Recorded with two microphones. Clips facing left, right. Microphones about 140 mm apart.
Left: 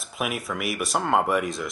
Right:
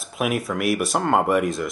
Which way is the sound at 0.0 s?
Centre (ahead or behind).